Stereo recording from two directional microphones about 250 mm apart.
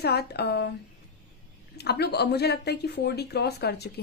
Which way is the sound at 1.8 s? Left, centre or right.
Left.